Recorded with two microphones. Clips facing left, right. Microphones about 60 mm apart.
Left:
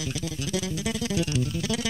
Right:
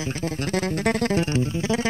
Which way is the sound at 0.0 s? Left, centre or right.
Right.